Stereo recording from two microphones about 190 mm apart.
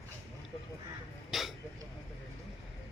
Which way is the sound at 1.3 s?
Centre (ahead or behind).